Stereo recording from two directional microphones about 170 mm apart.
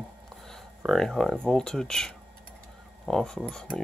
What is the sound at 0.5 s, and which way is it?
Speech, 5° left (ahead or behind).